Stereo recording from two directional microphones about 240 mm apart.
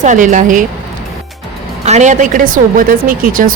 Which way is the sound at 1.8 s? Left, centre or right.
Right.